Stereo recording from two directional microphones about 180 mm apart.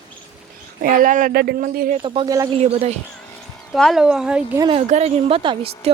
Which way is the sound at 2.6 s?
35° right (ahead or behind).